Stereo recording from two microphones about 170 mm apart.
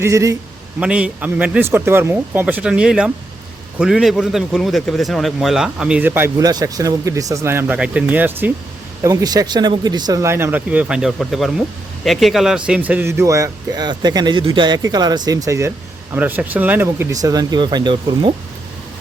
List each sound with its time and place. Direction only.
0.0 s a man's voice: 20° right (ahead or behind)
0.8 s a man's voice: 5° right (ahead or behind)
9.0 s a man's voice: 20° right (ahead or behind)